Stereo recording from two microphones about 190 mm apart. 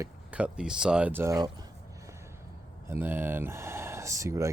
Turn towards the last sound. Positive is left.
turn(degrees=-15)  # may be behind; listen again after turning